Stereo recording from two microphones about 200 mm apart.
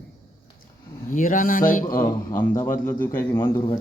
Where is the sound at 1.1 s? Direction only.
40° left (ahead or behind).